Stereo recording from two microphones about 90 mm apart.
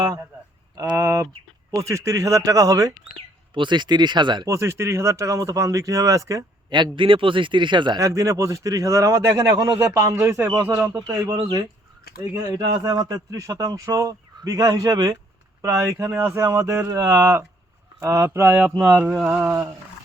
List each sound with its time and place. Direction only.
0.9 s a sound: 30° right (ahead or behind)
1.7 s a man's voice: 35° right (ahead or behind)
3.5 s a man's voice: 60° right (ahead or behind)
4.4 s a man's voice: 35° right (ahead or behind)
6.7 s a man's voice: 55° right (ahead or behind)
7.9 s a man's voice: 35° right (ahead or behind)
11.3 s a man's voice: 65° right (ahead or behind)
12.3 s a man's voice: 45° right (ahead or behind)
15.6 s a man's voice: 30° right (ahead or behind)
19.0 s mantra: 5° right (ahead or behind)
19.4 s a man's voice: 30° right (ahead or behind)